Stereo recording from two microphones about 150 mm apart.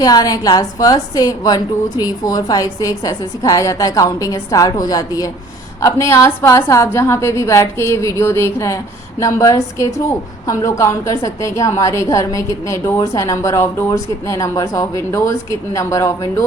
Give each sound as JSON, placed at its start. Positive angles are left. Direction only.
{"t": 0.0, "sound": "a woman's voice", "side_deg": 25}